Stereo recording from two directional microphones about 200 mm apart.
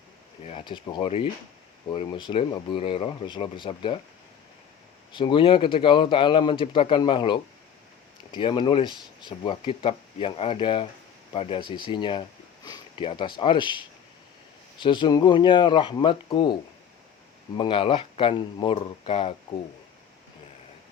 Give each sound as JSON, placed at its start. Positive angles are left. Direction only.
{"t": 0.4, "sound": "speech", "side_deg": 25}
{"t": 5.1, "sound": "speech", "side_deg": 25}
{"t": 17.6, "sound": "speech", "side_deg": 25}